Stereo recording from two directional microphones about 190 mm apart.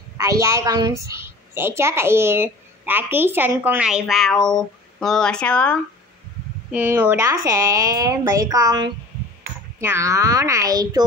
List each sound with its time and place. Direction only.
0.2 s a woman's voice: 15° right (ahead or behind); by 5.8 s 5° left (ahead or behind)
6.7 s a woman's voice: 10° right (ahead or behind)